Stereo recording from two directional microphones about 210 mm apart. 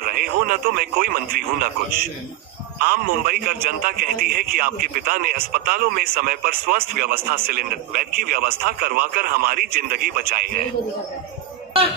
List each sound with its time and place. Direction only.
0.0 s a man's voice: 45° right (ahead or behind)